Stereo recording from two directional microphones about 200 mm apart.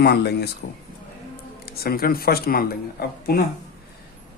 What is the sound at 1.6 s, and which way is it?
Speech, 50° left (ahead or behind).